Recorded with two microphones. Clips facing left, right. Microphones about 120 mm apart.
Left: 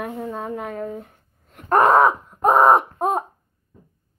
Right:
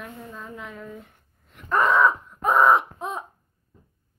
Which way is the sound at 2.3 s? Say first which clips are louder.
Left 5 dB; 40° left (ahead or behind).